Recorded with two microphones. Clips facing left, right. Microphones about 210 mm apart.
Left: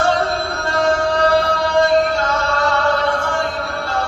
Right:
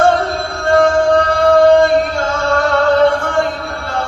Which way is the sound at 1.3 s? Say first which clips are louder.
Right 8 dB; 50° right (ahead or behind).